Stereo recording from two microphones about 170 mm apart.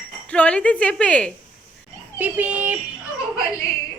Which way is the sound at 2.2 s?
10° right (ahead or behind).